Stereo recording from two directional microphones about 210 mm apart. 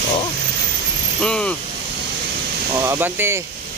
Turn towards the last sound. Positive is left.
turn(degrees=-10)  # may be behind; listen again after turning